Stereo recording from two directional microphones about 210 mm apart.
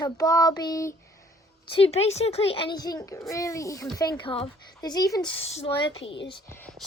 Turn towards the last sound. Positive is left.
turn(degrees=10)  # may be behind; listen again after turning